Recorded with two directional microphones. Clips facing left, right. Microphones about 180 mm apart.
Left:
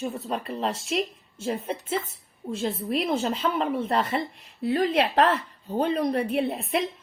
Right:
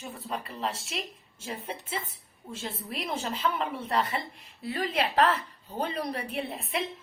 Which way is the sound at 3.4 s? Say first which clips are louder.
Left 5 dB; 40° left (ahead or behind).